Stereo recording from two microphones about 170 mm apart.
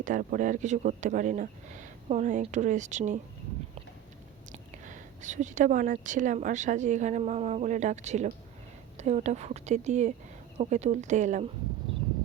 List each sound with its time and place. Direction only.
0.0 s speech: 50° right (ahead or behind)
4.5 s speech: 45° right (ahead or behind)